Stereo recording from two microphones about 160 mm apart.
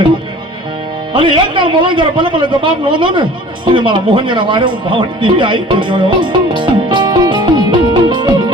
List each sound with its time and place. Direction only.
1.1 s a man's voice: 30° right (ahead or behind)
3.8 s music: 30° right (ahead or behind)